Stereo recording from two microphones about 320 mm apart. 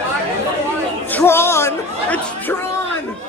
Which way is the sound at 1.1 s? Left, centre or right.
Centre.